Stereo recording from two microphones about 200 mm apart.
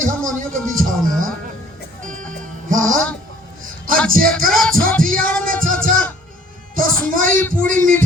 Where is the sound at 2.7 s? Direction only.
40° right (ahead or behind).